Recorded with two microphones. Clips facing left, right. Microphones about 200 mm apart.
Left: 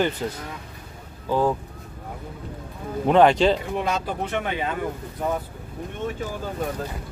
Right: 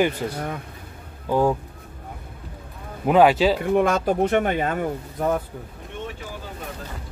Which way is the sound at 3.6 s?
50° right (ahead or behind).